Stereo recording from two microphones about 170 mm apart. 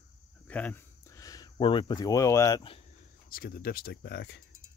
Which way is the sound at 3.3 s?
60° left (ahead or behind).